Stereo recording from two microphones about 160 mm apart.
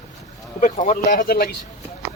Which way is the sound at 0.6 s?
50° left (ahead or behind).